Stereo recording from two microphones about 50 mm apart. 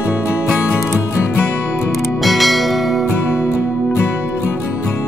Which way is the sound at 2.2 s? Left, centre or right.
Centre.